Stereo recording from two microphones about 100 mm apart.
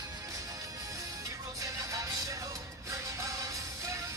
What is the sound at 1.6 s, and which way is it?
Music, 35° right (ahead or behind).